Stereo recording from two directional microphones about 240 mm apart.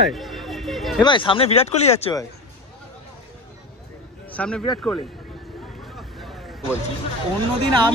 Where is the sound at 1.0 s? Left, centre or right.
Centre.